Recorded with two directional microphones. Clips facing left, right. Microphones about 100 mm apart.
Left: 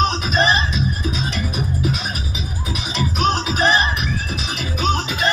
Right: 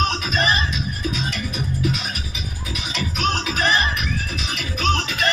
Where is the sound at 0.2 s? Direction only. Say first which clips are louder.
Left 4 dB; 30° left (ahead or behind).